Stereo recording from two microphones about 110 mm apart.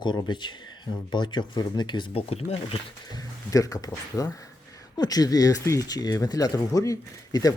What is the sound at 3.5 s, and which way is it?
Speech, 30° left (ahead or behind).